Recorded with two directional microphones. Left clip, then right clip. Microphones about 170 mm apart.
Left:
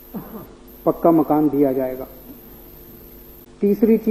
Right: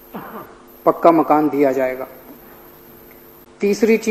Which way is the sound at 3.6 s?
15° right (ahead or behind).